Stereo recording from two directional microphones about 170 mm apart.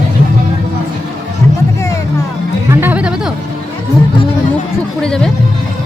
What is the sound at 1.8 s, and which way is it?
Music, 20° left (ahead or behind).